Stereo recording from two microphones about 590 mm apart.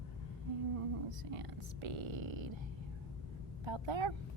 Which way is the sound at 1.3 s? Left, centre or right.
Right.